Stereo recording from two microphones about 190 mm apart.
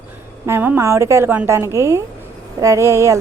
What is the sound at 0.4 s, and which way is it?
A woman's voice, 10° right (ahead or behind).